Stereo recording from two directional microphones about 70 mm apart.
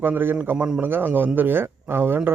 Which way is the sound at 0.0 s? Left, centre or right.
Right.